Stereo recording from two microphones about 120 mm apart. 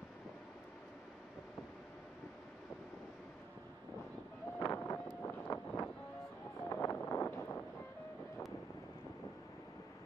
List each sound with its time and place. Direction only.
4.6 s vehicle: 25° left (ahead or behind)